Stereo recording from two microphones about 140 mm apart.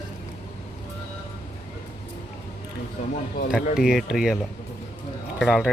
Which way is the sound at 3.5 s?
5° right (ahead or behind).